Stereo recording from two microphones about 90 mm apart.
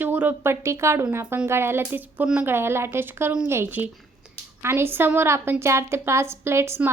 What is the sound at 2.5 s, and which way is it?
A woman's voice, 25° right (ahead or behind).